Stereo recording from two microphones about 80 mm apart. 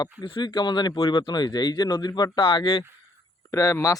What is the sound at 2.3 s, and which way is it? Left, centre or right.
Speech, left.